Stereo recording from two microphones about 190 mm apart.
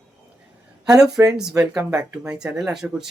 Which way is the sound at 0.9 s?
5° right (ahead or behind).